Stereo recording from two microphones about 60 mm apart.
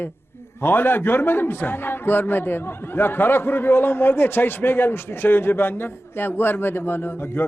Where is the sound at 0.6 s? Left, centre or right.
Left.